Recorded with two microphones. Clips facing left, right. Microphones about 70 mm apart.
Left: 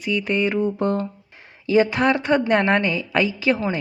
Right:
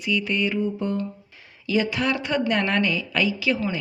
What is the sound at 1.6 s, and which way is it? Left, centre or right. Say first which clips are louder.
Speech: left 6 dB; left.